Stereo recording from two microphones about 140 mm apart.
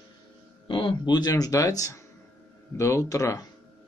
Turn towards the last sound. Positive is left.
turn(degrees=25)  # may be behind; listen again after turning